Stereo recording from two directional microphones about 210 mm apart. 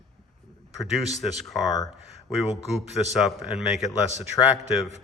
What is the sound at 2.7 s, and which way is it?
Speech, centre (ahead or behind).